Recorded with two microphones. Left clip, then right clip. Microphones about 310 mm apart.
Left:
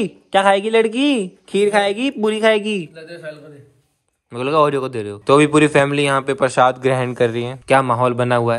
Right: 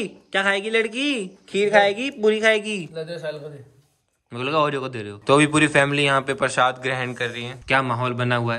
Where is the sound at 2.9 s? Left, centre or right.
Right.